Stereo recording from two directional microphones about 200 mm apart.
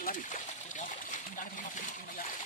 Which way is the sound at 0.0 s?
40° left (ahead or behind).